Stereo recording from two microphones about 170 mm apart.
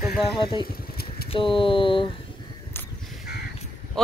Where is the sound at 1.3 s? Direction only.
30° left (ahead or behind).